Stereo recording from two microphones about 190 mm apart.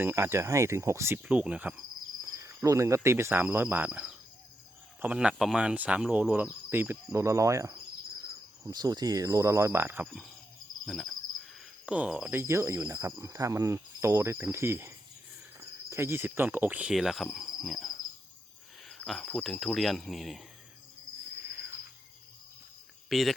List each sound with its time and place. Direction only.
0.0 s speech: 10° right (ahead or behind)
10.8 s cricket: centre (ahead or behind)
11.9 s speech: 5° right (ahead or behind)
17.3 s insect: centre (ahead or behind)
18.9 s speech: centre (ahead or behind)
23.0 s speech: centre (ahead or behind)